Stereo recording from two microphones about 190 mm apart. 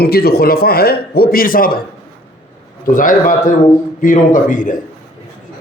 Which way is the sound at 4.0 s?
45° left (ahead or behind).